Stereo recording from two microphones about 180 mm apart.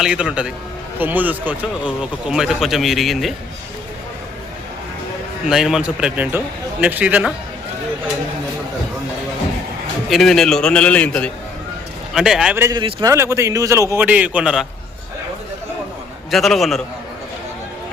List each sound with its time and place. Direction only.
0.0 s speech: 5° right (ahead or behind)
5.5 s a man's voice: 5° right (ahead or behind)
10.1 s speech: centre (ahead or behind)
12.5 s a man's voice: 15° right (ahead or behind)
16.3 s speech: centre (ahead or behind)